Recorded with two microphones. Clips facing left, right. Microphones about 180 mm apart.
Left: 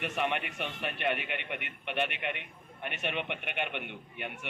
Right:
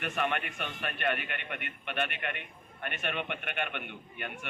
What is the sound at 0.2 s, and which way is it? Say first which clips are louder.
Speech: even; 25° left (ahead or behind).